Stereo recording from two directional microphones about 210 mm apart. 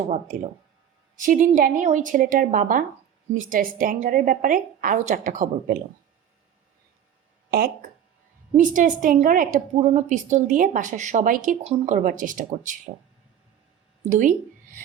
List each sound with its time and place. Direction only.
1.1 s a woman's voice: 40° right (ahead or behind)
7.5 s a woman's voice: 45° right (ahead or behind)
14.0 s a sound: 40° right (ahead or behind)